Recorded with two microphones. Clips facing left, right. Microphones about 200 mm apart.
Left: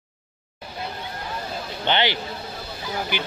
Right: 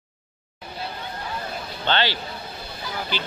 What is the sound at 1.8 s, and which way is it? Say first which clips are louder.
Speech: left 1 dB; 15° left (ahead or behind).